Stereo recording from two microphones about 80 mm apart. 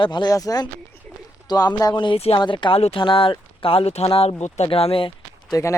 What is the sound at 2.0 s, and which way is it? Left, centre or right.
Speech, left.